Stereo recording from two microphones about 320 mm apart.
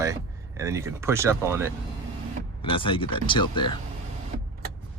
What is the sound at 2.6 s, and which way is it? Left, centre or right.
Speech, centre.